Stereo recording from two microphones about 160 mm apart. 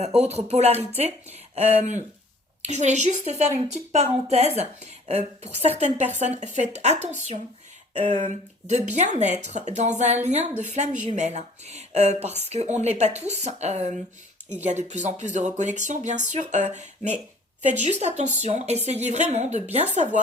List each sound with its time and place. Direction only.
0.0 s speech: 40° right (ahead or behind)